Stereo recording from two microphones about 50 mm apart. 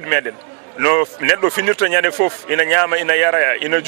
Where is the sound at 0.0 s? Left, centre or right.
Right.